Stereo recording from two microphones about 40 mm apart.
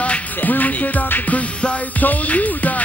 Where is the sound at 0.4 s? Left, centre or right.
Left.